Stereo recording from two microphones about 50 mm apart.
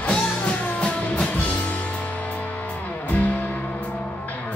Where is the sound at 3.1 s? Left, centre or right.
Left.